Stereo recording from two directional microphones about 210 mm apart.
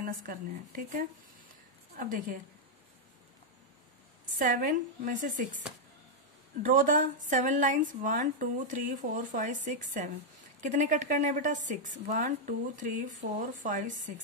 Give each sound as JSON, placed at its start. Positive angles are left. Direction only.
{"t": 0.0, "sound": "a woman's voice", "side_deg": -40}
{"t": 4.4, "sound": "a woman's voice", "side_deg": -40}
{"t": 6.6, "sound": "a woman's voice", "side_deg": -40}